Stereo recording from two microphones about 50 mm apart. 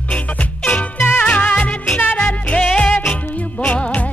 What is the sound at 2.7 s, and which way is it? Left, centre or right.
Music, left.